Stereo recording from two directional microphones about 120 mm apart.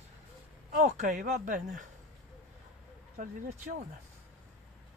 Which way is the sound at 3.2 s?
90° right.